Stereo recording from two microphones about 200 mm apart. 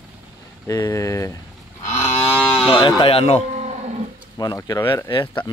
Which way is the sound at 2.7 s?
25° left (ahead or behind).